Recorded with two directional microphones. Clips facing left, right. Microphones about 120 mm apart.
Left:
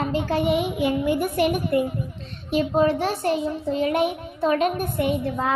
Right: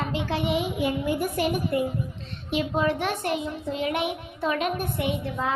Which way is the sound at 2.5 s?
35° left (ahead or behind).